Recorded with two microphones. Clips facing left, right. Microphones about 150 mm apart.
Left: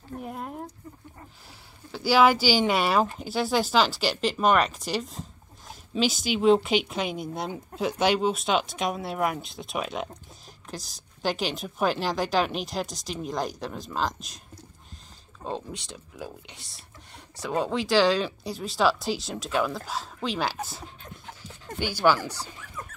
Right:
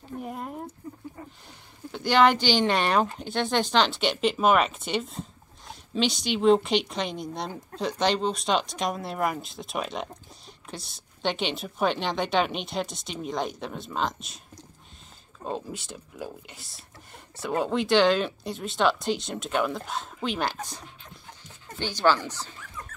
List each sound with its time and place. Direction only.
0.2 s a sound: centre (ahead or behind)
1.9 s a woman's voice: 5° left (ahead or behind)
15.4 s a woman's voice: centre (ahead or behind)